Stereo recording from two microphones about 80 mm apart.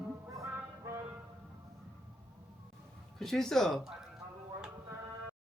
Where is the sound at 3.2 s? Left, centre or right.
Centre.